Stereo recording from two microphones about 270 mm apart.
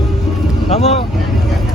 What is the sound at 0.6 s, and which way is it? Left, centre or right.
Speech, left.